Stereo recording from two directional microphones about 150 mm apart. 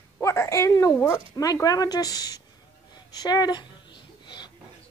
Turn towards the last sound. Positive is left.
turn(degrees=30)  # may be behind; listen again after turning